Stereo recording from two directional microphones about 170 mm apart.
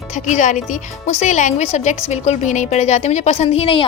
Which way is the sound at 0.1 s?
45° left (ahead or behind).